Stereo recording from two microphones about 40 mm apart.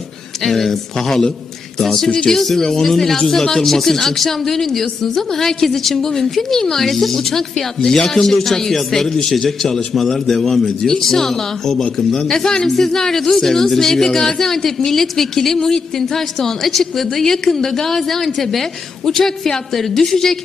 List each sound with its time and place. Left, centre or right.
0.4 s speech: centre
2.0 s speech: left
2.3 s speech: centre